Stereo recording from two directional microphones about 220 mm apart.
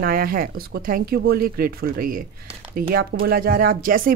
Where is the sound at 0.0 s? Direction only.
40° right (ahead or behind).